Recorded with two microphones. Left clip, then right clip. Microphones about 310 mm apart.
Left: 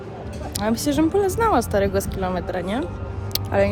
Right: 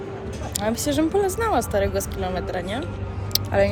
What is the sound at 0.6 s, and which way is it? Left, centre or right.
Speech, centre.